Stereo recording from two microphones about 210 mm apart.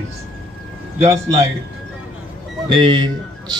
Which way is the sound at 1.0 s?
30° right (ahead or behind).